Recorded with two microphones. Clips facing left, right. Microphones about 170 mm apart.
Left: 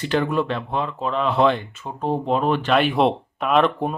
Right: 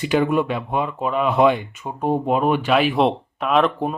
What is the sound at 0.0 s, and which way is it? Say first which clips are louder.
Speech: right 3 dB; 10° right (ahead or behind).